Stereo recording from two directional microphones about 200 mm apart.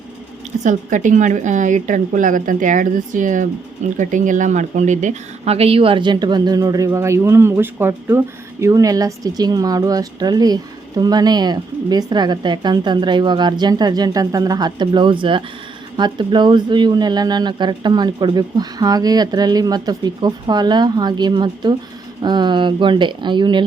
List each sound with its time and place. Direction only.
0.6 s a woman's voice: 40° right (ahead or behind)